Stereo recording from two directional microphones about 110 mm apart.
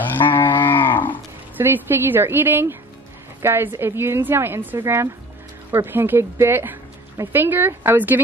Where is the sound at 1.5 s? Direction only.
20° right (ahead or behind).